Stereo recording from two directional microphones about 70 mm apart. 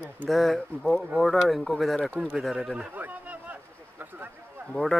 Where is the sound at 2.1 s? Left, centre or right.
Centre.